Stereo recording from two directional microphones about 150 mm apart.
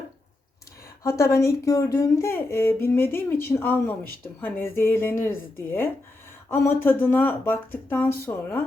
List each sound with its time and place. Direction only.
1.0 s speech: 20° left (ahead or behind)